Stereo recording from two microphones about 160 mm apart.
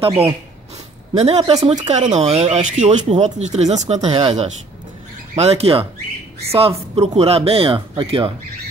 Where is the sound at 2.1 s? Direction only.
40° right (ahead or behind).